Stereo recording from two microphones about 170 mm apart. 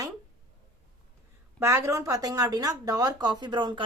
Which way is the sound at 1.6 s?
15° right (ahead or behind).